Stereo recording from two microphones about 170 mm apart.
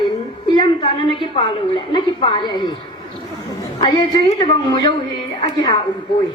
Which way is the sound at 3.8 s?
25° left (ahead or behind).